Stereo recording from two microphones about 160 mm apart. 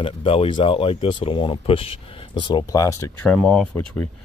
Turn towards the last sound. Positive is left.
turn(degrees=10)  # may be behind; listen again after turning